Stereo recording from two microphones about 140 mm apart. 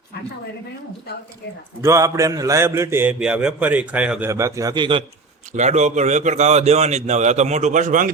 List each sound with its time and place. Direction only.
1.8 s a man's voice: 20° right (ahead or behind)
4.3 s a man's voice: 20° right (ahead or behind)
5.5 s a man's voice: 55° right (ahead or behind)